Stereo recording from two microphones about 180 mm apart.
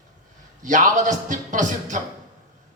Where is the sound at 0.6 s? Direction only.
45° right (ahead or behind).